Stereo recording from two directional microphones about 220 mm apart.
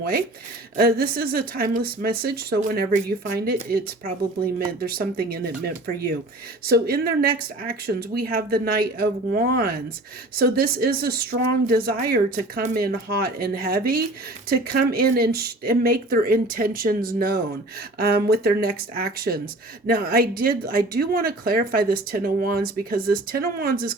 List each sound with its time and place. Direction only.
0.8 s speech: 45° right (ahead or behind)
6.7 s speech: 45° right (ahead or behind)